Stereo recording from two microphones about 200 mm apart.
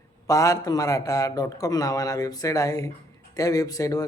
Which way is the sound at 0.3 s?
15° left (ahead or behind).